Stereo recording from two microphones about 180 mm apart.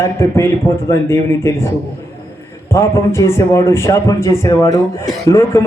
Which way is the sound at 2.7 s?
15° left (ahead or behind).